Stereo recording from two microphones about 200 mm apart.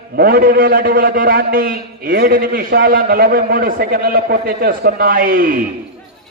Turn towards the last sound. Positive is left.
turn(degrees=-45)  # may be behind; listen again after turning